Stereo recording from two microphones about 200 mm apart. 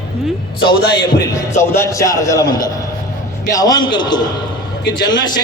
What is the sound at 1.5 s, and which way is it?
Speech, 15° left (ahead or behind).